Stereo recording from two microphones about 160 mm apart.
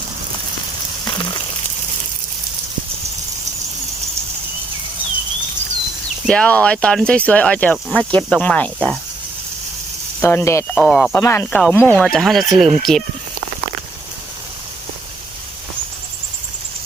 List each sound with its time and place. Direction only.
1.0 s a sound: 30° left (ahead or behind)
6.2 s speech: 5° left (ahead or behind)
10.2 s speech: 15° left (ahead or behind)
10.8 s speech: centre (ahead or behind)
11.1 s speech: 15° left (ahead or behind)